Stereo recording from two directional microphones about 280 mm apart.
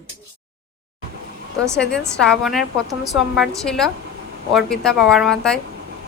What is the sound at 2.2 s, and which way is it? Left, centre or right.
A woman's voice, centre.